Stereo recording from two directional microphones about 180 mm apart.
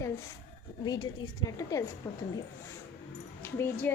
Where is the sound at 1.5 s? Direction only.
20° left (ahead or behind).